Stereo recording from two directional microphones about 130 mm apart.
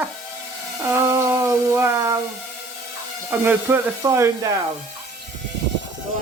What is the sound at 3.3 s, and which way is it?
Speech, 15° right (ahead or behind).